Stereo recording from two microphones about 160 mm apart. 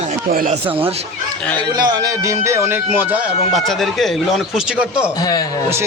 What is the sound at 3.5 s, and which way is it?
Speech, centre (ahead or behind).